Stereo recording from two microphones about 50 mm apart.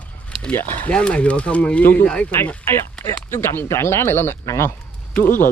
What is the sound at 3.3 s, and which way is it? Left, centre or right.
Speech, left.